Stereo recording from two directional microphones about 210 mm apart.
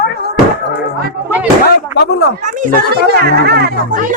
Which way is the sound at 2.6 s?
45° right (ahead or behind).